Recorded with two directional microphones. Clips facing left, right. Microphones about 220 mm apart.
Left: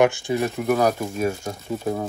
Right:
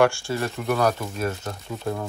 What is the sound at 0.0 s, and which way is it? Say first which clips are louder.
Speech: left 2 dB; 20° left (ahead or behind).